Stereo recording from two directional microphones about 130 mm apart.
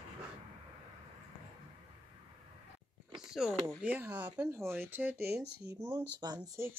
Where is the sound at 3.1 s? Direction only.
5° right (ahead or behind).